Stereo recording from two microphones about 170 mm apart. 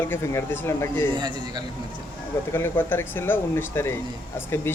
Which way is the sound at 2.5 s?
10° left (ahead or behind).